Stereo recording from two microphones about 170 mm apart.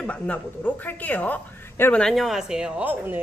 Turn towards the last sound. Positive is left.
turn(degrees=-10)  # may be behind; listen again after turning